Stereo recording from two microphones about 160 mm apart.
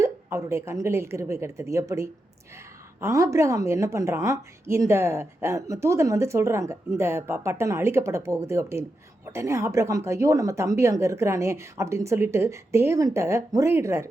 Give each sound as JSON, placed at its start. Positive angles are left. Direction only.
{"t": 0.0, "sound": "a woman's voice", "side_deg": -20}